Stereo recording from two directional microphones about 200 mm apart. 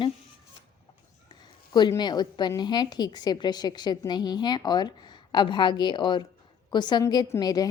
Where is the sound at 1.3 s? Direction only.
20° left (ahead or behind).